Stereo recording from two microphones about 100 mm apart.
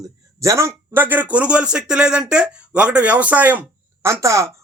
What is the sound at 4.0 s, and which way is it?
Speech, 30° right (ahead or behind).